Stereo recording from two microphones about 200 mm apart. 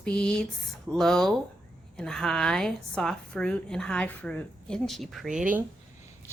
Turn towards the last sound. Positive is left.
turn(degrees=-5)  # may be behind; listen again after turning